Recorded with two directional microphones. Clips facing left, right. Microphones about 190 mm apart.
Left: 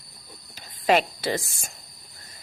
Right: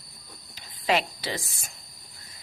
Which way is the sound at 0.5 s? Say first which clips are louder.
Left 4 dB; 50° left (ahead or behind).